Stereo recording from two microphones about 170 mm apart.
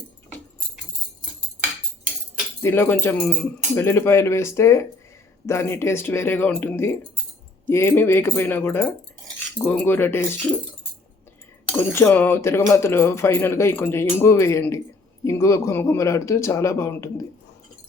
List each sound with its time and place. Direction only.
2.6 s speech: 15° left (ahead or behind)
11.7 s speech: 10° left (ahead or behind)